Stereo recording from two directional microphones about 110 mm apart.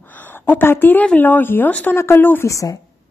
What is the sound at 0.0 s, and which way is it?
A woman's voice, 20° left (ahead or behind).